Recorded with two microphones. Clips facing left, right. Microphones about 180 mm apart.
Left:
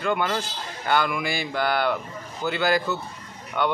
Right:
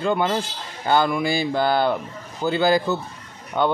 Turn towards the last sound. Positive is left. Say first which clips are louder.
# right 4 dB
turn(degrees=-35)  # may be behind; listen again after turning